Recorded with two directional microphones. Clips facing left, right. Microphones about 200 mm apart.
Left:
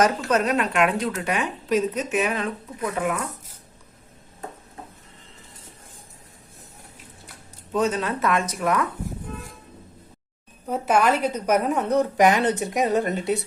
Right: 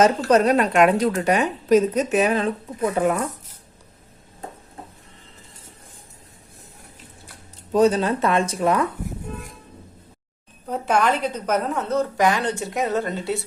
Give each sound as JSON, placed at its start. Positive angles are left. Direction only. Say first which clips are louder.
{"t": 0.3, "sound": "a woman's voice", "louder": "right 5 dB", "side_deg": -35}
{"t": 7.7, "sound": "a woman's voice", "louder": "right 6 dB", "side_deg": -35}
{"t": 10.7, "sound": "a woman's voice", "louder": "even", "side_deg": 5}